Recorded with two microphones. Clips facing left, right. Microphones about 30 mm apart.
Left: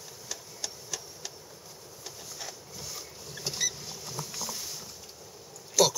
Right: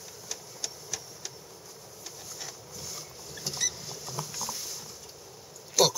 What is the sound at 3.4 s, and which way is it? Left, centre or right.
Rodents, centre.